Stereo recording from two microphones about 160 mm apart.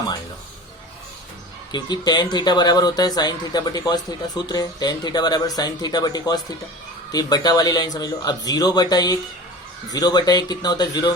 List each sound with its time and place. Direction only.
1.7 s speech: 25° left (ahead or behind)